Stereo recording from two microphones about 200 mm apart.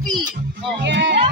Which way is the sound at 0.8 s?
60° right (ahead or behind).